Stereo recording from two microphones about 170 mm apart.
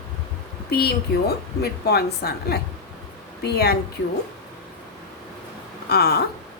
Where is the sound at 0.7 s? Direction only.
70° left (ahead or behind).